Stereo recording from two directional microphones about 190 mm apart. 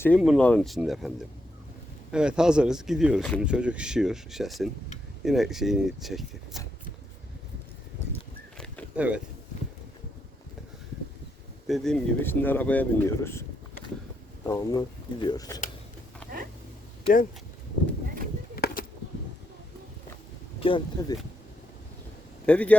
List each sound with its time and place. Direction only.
0.2 s speech: centre (ahead or behind)
8.5 s a sound: 5° left (ahead or behind)
9.0 s speech: 5° right (ahead or behind)
11.7 s speech: centre (ahead or behind)
14.4 s speech: 20° left (ahead or behind)
18.5 s a sound: 50° left (ahead or behind)
20.6 s speech: 25° left (ahead or behind)
22.4 s speech: 5° left (ahead or behind)